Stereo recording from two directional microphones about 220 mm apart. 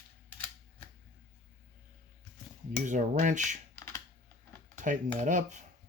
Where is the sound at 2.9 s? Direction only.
35° right (ahead or behind).